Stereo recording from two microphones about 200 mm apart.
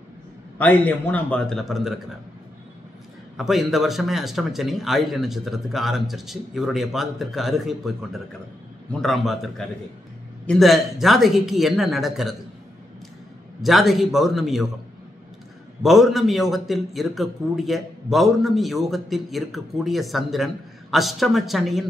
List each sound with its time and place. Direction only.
0.6 s a man's voice: 10° left (ahead or behind)
3.3 s a man's voice: centre (ahead or behind)
13.6 s a man's voice: centre (ahead or behind)
15.8 s a man's voice: centre (ahead or behind)